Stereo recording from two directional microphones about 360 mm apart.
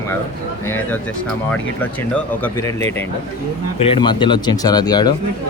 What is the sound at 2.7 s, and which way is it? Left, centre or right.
Speech, centre.